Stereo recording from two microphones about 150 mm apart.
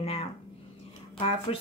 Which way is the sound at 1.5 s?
40° left (ahead or behind).